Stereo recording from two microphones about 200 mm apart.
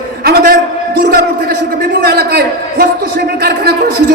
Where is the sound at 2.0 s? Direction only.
50° right (ahead or behind).